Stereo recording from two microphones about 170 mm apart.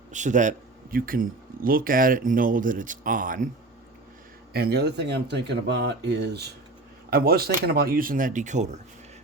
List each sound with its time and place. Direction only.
0.1 s speech: 45° right (ahead or behind)
4.5 s speech: 70° right (ahead or behind)
7.1 s speech: 65° right (ahead or behind); by 8.8 s 45° right (ahead or behind)